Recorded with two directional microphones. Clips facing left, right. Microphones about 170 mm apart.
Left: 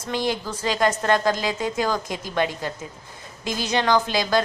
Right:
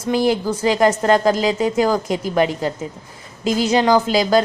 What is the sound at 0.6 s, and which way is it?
Speech, 25° right (ahead or behind).